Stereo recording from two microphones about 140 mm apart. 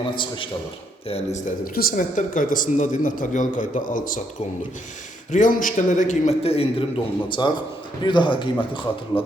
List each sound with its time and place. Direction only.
1.0 s speech: 45° left (ahead or behind)
1.5 s speech: 85° left
5.3 s a man's voice: 70° left (ahead or behind); by 9.2 s 35° left (ahead or behind)